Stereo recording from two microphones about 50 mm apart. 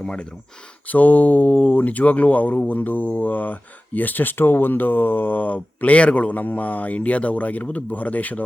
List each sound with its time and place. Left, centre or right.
0.0 s speech: centre
0.9 s speech: left